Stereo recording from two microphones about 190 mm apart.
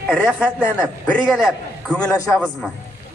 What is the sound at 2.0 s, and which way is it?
Speech, 15° left (ahead or behind).